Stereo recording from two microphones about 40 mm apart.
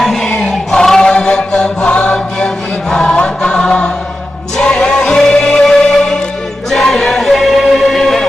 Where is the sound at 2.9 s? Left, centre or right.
Centre.